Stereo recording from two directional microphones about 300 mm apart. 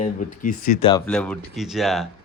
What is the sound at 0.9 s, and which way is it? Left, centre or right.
Speech, centre.